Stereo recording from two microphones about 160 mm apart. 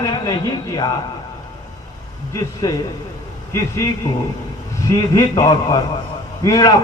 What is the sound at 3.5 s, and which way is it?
A man's voice, 20° left (ahead or behind).